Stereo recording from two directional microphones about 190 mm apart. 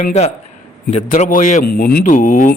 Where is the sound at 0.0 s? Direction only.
35° left (ahead or behind).